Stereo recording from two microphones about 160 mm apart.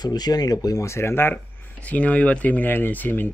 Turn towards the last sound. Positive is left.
turn(degrees=10)  # may be behind; listen again after turning